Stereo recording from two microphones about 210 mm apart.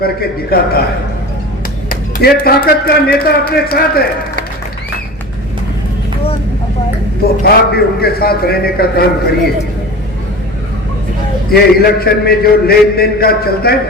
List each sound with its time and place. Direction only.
0.0 s a man's voice: 45° left (ahead or behind)
1.9 s a man's voice: 45° left (ahead or behind)
7.4 s a man's voice: 45° left (ahead or behind)
11.5 s a man's voice: 45° left (ahead or behind)